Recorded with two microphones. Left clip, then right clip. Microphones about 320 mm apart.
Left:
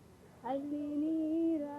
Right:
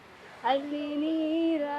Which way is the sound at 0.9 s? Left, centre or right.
Right.